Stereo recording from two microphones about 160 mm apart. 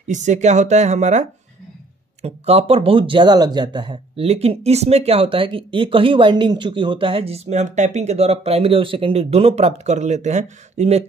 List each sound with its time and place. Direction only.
0.1 s speech: 50° right (ahead or behind)
2.2 s speech: 40° right (ahead or behind)